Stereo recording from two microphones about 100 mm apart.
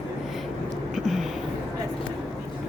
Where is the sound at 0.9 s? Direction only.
5° right (ahead or behind).